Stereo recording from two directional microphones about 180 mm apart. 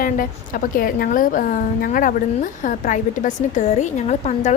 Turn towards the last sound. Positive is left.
turn(degrees=40)  # may be behind; listen again after turning